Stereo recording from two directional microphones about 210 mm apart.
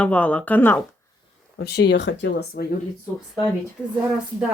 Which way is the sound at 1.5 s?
50° left (ahead or behind).